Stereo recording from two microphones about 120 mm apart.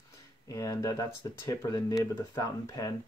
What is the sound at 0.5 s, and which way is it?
Speech, 25° left (ahead or behind).